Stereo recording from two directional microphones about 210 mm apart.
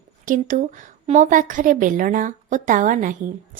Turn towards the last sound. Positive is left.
turn(degrees=-40)  # may be behind; listen again after turning